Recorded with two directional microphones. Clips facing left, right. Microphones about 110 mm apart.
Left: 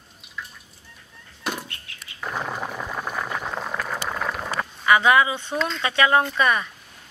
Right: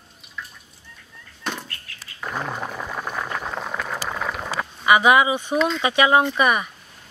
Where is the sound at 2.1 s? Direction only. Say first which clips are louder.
Right 1 dB; centre (ahead or behind).